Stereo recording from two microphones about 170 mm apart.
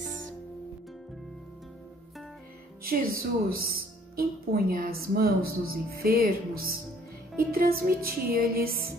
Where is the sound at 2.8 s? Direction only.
60° right (ahead or behind).